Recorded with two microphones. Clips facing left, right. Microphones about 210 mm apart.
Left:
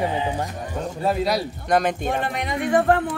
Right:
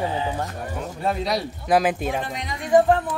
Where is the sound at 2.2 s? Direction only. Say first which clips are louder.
Left 6 dB; 60° left (ahead or behind).